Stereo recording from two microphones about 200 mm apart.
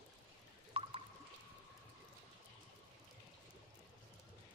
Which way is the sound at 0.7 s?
30° right (ahead or behind).